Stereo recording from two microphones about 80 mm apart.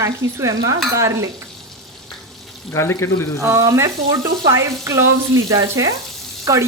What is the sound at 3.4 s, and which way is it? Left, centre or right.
Speech, right.